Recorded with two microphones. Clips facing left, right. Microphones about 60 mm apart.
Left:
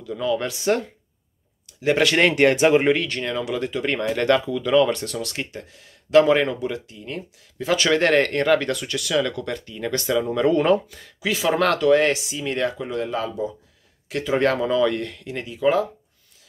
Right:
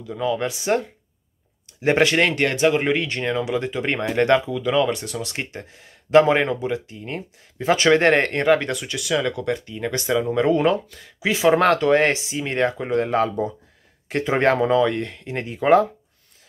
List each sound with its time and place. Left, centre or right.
0.0 s speech: centre
1.8 s speech: right
2.1 s speech: centre
2.5 s speech: centre
2.9 s speech: centre
4.5 s speech: centre; by 13.5 s right
14.0 s speech: right